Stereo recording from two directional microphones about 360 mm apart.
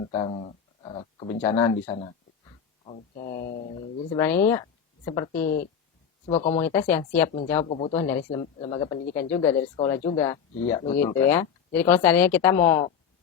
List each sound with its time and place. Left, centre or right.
0.1 s speech: centre
6.7 s speech: centre
7.6 s speech: centre